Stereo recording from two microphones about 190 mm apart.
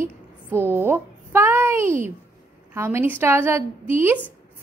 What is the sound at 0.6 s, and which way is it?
A child's voice, 10° right (ahead or behind).